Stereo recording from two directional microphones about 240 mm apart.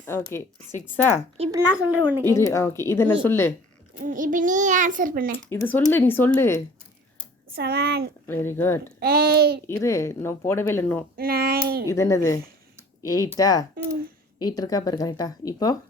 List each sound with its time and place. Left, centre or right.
0.0 s speech: centre
1.4 s speech: centre
2.2 s speech: centre
3.9 s a child's voice: right
5.3 s speech: centre
7.5 s a child's voice: right
8.3 s speech: centre
9.0 s a child's voice: right
9.6 s speech: centre
11.2 s a child's voice: right
11.9 s speech: centre